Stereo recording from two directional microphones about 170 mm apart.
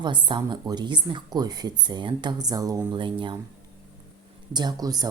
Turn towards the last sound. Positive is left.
turn(degrees=-25)  # may be behind; listen again after turning